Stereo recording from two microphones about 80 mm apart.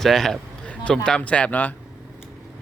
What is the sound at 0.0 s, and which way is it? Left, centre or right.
Speech, centre.